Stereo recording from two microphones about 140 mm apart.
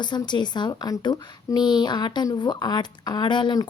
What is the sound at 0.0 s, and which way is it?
Speech, 30° left (ahead or behind).